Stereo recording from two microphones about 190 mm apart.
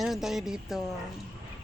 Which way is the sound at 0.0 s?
Centre (ahead or behind).